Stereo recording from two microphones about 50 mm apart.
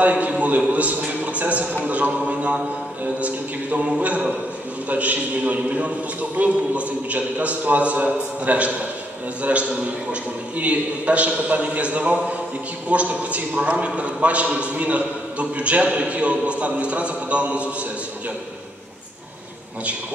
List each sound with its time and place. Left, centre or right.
0.0 s a man's voice: right